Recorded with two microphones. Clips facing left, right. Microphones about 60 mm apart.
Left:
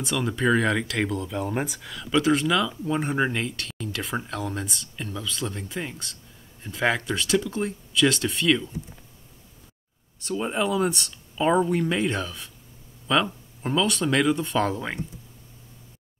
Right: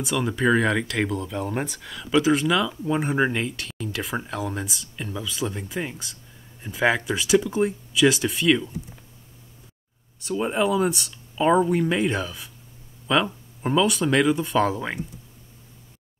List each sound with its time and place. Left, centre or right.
0.0 s speech: centre
10.1 s speech: centre